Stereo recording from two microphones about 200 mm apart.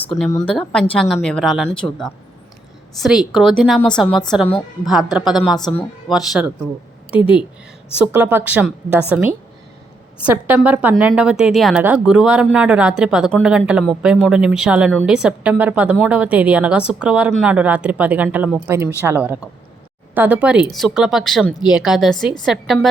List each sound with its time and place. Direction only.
0.3 s speech: 15° left (ahead or behind)
0.5 s a woman's voice: 5° left (ahead or behind)
7.9 s a woman's voice: 5° right (ahead or behind)